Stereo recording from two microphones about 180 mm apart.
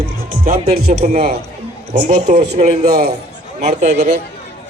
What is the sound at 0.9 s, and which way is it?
Speech, 40° right (ahead or behind).